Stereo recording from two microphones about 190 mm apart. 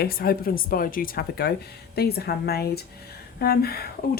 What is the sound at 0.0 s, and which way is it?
Speech, 50° left (ahead or behind).